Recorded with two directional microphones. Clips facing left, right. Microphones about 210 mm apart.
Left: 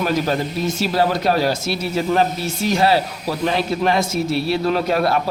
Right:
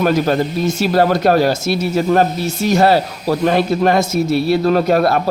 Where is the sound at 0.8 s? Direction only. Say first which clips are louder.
Right 5 dB; 50° right (ahead or behind).